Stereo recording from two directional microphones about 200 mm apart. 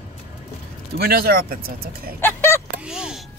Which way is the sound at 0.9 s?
50° right (ahead or behind).